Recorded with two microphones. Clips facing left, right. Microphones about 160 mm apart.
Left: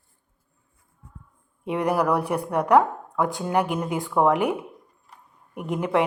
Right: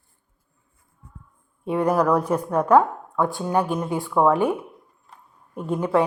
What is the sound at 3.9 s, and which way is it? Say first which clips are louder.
Speech: right 2 dB; 15° left (ahead or behind).